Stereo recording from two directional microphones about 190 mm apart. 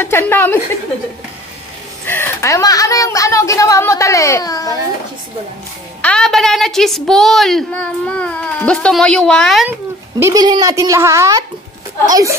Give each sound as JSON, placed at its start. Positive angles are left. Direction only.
{"t": 0.0, "sound": "speech", "side_deg": 10}
{"t": 2.0, "sound": "speech", "side_deg": 10}
{"t": 6.0, "sound": "a woman's voice", "side_deg": 5}
{"t": 9.7, "sound": "speech", "side_deg": -15}